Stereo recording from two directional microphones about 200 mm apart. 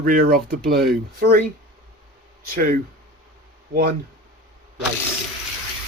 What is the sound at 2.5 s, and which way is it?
Speech, 45° right (ahead or behind).